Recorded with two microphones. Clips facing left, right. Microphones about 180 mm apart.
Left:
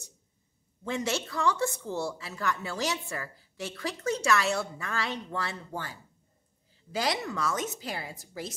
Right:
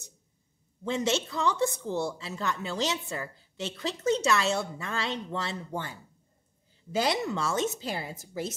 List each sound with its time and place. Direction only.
0.8 s a woman's voice: 20° right (ahead or behind)